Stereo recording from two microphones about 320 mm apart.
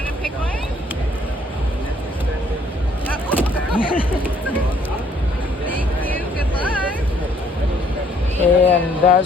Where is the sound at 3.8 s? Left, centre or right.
Left.